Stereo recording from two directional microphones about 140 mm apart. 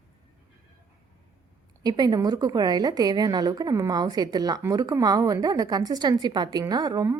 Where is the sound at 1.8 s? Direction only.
30° right (ahead or behind).